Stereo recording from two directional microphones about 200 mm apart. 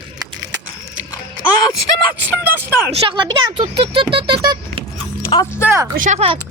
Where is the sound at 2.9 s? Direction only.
25° right (ahead or behind).